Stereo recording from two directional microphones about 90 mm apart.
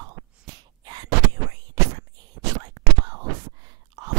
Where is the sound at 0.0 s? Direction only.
50° right (ahead or behind).